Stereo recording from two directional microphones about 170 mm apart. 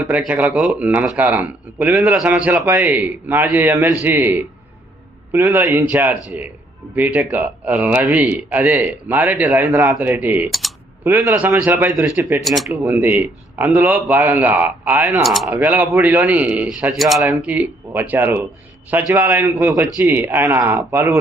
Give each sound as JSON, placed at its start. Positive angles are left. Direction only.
{"t": 0.0, "sound": "a man's voice", "side_deg": -10}
{"t": 10.5, "sound": "typing", "side_deg": 0}
{"t": 11.1, "sound": "a man's voice", "side_deg": -10}
{"t": 12.6, "sound": "a man's voice", "side_deg": -15}
{"t": 15.2, "sound": "speech", "side_deg": 0}
{"t": 15.4, "sound": "a man's voice", "side_deg": -10}